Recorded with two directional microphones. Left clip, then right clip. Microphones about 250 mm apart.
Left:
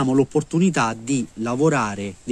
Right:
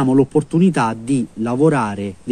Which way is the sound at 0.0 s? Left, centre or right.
Centre.